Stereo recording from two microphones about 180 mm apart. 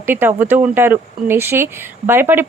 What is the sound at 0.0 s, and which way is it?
Speech, 10° right (ahead or behind).